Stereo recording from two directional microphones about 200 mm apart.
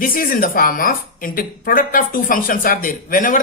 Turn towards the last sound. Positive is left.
turn(degrees=40)  # may be behind; listen again after turning